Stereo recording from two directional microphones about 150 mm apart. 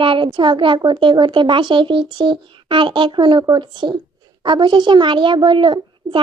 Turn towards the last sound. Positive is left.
turn(degrees=-35)  # may be behind; listen again after turning